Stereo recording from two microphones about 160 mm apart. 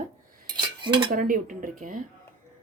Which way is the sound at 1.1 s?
60° right (ahead or behind).